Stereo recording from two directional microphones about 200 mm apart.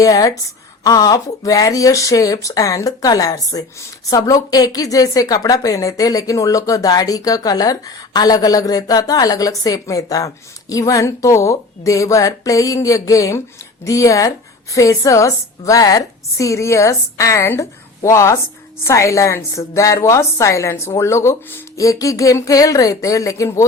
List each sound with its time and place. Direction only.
0.0 s speech: 15° left (ahead or behind)